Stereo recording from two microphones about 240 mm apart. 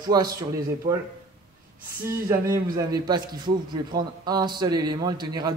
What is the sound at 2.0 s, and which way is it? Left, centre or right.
A man's voice, centre.